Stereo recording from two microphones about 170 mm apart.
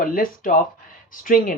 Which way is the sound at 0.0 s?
55° left (ahead or behind).